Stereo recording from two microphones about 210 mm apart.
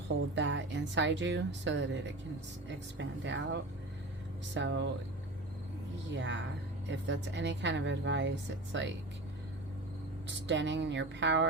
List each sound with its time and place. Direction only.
0.3 s speech: 60° right (ahead or behind)
6.1 s speech: 60° right (ahead or behind)
10.2 s speech: 60° right (ahead or behind)